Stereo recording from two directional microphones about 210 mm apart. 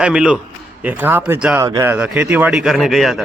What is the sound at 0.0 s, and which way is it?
A man's voice, 5° right (ahead or behind).